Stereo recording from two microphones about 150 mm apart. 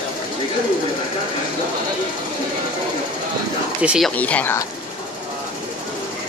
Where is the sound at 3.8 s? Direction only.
5° right (ahead or behind).